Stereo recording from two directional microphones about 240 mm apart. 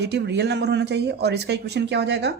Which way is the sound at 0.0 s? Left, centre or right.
Right.